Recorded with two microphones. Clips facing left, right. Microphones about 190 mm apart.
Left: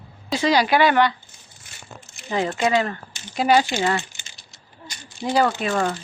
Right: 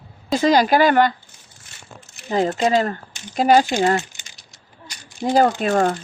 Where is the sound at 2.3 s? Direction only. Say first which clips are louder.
Right 3 dB; 40° right (ahead or behind).